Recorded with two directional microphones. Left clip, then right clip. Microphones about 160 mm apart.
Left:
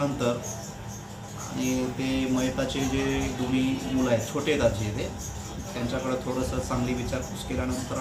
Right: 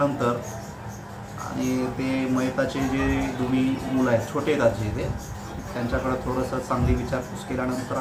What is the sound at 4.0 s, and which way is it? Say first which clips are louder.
Speech: right 3 dB; 10° right (ahead or behind).